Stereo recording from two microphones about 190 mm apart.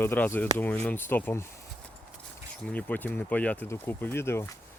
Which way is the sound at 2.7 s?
10° left (ahead or behind).